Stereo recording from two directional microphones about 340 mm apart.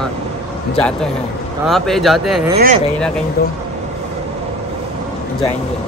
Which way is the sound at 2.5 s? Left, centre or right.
Right.